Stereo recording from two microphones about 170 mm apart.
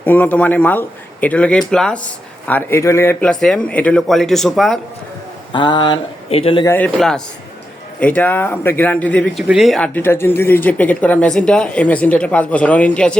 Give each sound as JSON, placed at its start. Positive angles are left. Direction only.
{"t": 0.0, "sound": "speech", "side_deg": 10}
{"t": 5.5, "sound": "speech", "side_deg": 25}
{"t": 6.7, "sound": "speech", "side_deg": 10}